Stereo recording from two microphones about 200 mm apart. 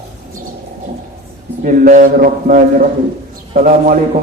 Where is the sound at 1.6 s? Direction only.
40° right (ahead or behind).